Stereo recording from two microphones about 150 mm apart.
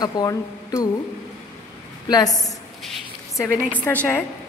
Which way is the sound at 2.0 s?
25° left (ahead or behind).